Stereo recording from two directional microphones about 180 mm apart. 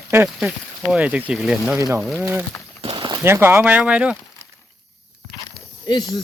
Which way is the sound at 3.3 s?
15° right (ahead or behind).